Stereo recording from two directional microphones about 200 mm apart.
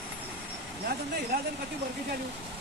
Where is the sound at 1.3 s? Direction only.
50° right (ahead or behind).